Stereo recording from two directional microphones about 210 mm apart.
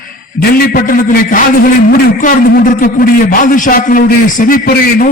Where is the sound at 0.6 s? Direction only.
40° left (ahead or behind).